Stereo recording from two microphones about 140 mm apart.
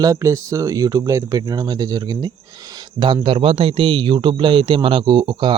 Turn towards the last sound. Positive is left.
turn(degrees=-35)  # may be behind; listen again after turning